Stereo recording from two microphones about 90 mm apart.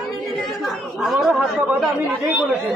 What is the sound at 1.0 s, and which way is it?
Speech, 5° right (ahead or behind).